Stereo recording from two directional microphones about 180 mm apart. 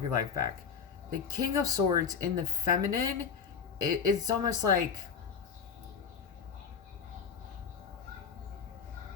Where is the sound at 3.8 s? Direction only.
20° right (ahead or behind).